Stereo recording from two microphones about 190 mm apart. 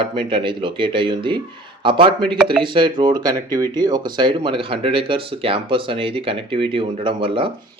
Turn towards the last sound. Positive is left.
turn(degrees=-25)  # may be behind; listen again after turning